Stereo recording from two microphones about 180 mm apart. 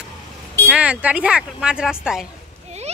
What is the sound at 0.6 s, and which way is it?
Speech, 5° right (ahead or behind).